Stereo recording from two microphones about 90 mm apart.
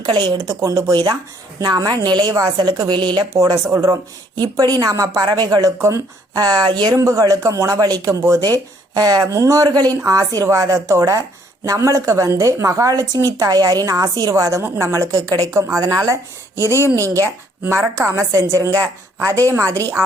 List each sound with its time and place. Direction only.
0.0 s a woman's voice: 60° right (ahead or behind)
3.3 s speech: 35° right (ahead or behind)
4.6 s a woman's voice: 45° right (ahead or behind)
6.9 s a woman's voice: 40° right (ahead or behind)